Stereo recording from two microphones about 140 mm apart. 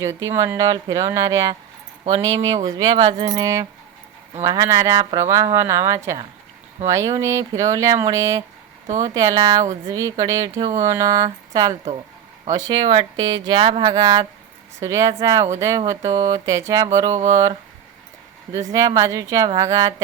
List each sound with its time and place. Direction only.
0.0 s speech: 20° right (ahead or behind)
12.8 s speech: 40° right (ahead or behind)
17.1 s a sound: 50° right (ahead or behind)
18.5 s speech: 25° right (ahead or behind)